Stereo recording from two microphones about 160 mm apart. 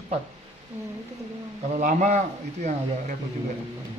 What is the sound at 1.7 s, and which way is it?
Speech, 50° right (ahead or behind).